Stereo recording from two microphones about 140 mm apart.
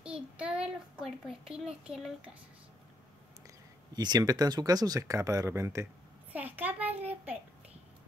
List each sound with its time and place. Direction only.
0.0 s a child's voice: 5° right (ahead or behind)
3.4 s a child's voice: 30° right (ahead or behind); by 7.3 s 10° right (ahead or behind)